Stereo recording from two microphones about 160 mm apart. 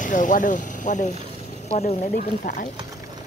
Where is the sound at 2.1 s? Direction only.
60° left (ahead or behind).